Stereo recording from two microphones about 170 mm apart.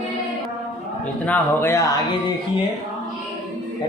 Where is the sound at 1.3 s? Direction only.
15° left (ahead or behind).